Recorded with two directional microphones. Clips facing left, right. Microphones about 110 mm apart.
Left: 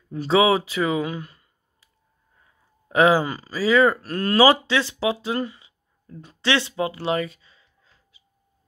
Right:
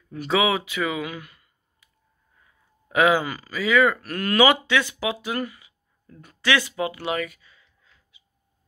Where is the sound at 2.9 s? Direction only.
30° left (ahead or behind).